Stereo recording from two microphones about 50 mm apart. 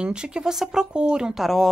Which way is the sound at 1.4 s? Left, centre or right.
Centre.